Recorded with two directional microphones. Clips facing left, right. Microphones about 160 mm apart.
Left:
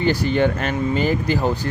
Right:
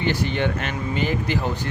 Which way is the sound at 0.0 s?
40° left (ahead or behind).